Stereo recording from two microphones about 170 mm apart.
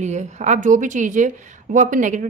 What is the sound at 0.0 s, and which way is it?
Speech, 45° right (ahead or behind).